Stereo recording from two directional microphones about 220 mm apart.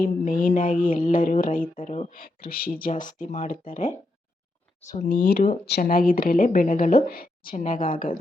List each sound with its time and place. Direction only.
0.0 s speech: 35° left (ahead or behind)